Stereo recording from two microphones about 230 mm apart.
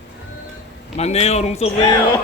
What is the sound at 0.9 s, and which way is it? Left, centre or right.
Speech, left.